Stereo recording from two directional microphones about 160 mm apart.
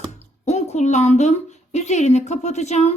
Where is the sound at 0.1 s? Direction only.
45° left (ahead or behind).